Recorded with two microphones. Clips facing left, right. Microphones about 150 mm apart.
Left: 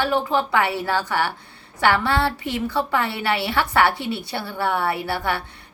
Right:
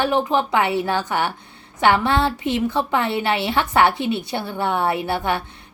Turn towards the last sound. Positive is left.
turn(degrees=-20)  # may be behind; listen again after turning